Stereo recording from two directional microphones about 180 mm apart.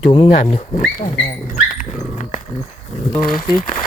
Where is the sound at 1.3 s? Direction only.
45° left (ahead or behind).